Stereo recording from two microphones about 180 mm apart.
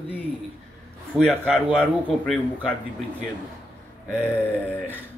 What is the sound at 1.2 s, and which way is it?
Speech, 5° left (ahead or behind).